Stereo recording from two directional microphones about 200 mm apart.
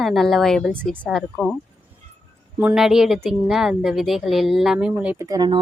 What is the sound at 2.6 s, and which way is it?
A woman's voice, 5° right (ahead or behind).